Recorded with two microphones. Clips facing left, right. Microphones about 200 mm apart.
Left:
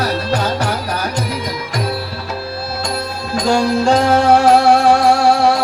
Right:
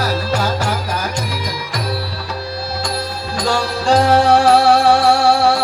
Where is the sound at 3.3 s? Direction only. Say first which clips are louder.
Left 5 dB; 25° left (ahead or behind).